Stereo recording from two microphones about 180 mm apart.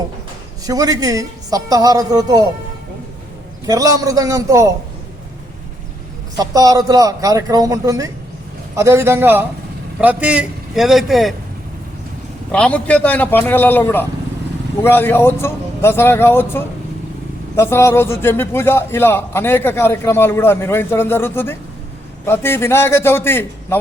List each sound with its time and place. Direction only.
0.6 s a man's voice: 20° right (ahead or behind)
3.7 s a man's voice: 20° right (ahead or behind)
6.3 s a man's voice: 20° right (ahead or behind); by 11.3 s centre (ahead or behind)
12.5 s a man's voice: 5° left (ahead or behind)